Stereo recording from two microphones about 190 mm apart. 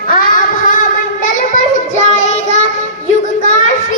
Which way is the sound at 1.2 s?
40° left (ahead or behind).